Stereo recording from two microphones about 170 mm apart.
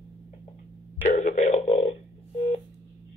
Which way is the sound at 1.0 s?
45° left (ahead or behind).